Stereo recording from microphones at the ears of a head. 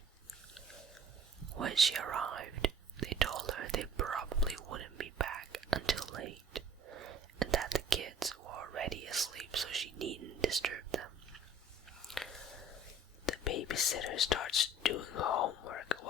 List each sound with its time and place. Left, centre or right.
1.4 s whispering: right
13.2 s whispering: left